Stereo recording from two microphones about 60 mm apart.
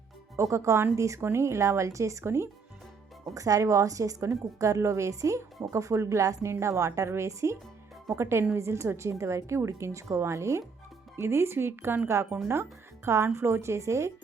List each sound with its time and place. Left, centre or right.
0.3 s a woman's voice: right
3.3 s a woman's voice: right